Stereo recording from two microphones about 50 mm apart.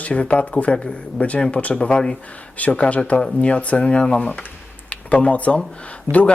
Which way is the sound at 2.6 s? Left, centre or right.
Left.